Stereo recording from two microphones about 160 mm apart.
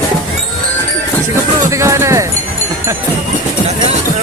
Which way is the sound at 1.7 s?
20° right (ahead or behind).